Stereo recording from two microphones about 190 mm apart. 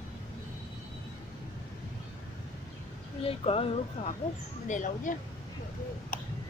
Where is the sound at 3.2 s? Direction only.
30° left (ahead or behind).